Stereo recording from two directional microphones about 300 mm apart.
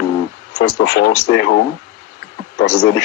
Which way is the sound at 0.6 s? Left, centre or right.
Left.